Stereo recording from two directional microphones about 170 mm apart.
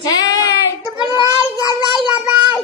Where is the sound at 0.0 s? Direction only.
20° left (ahead or behind).